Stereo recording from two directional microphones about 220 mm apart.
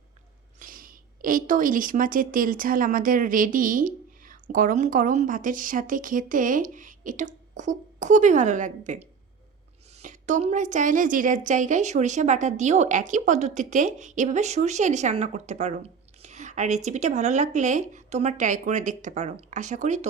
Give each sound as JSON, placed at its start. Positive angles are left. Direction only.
{"t": 0.6, "sound": "a woman's voice", "side_deg": -40}